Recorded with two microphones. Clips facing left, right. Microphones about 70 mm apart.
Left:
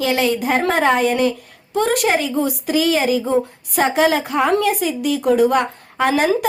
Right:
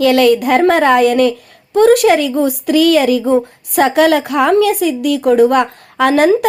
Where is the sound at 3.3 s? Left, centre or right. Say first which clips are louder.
Right 5 dB; right.